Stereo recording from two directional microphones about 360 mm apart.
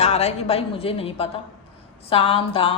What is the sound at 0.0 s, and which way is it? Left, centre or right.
Speech, centre.